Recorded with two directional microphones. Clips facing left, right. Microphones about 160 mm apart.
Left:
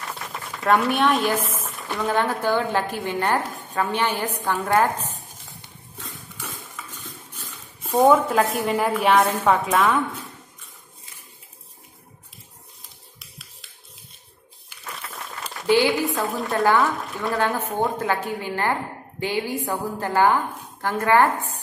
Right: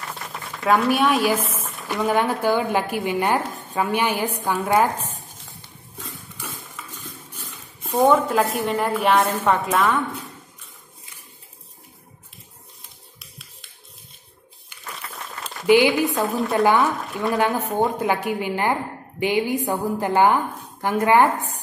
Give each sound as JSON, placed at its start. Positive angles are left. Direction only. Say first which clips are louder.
{"t": 0.2, "sound": "speech", "louder": "right 2 dB", "side_deg": 0}
{"t": 1.6, "sound": "a sound", "louder": "right 3 dB", "side_deg": 0}
{"t": 2.1, "sound": "a woman's voice", "louder": "right 1 dB", "side_deg": -15}
{"t": 5.9, "sound": "a sound", "louder": "right 1 dB", "side_deg": 0}
{"t": 7.8, "sound": "a woman's voice", "louder": "left 1 dB", "side_deg": 0}
{"t": 14.7, "sound": "a sound", "louder": "even", "side_deg": 0}
{"t": 15.6, "sound": "a woman's voice", "louder": "right 3 dB", "side_deg": -15}
{"t": 15.9, "sound": "a woman's voice", "louder": "right 2 dB", "side_deg": 0}
{"t": 16.5, "sound": "a woman's voice", "louder": "right 1 dB", "side_deg": -20}